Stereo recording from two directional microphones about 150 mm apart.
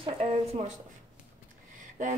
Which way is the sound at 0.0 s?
40° right (ahead or behind).